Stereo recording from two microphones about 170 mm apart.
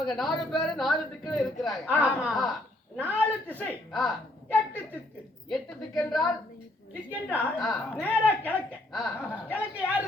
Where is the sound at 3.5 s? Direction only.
10° left (ahead or behind).